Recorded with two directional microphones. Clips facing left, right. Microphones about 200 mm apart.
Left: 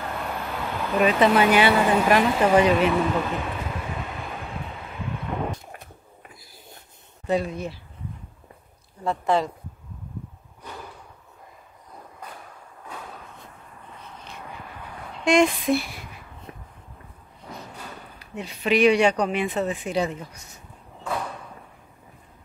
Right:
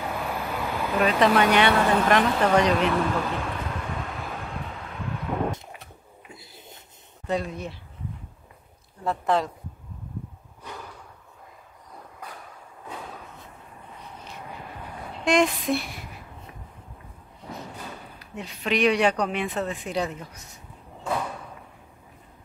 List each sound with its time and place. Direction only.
0.0 s vehicle: 5° right (ahead or behind)
6.3 s a sound: 25° right (ahead or behind)
7.2 s speech: centre (ahead or behind)
9.0 s speech: centre (ahead or behind)
15.2 s speech: centre (ahead or behind)
18.2 s speech: centre (ahead or behind)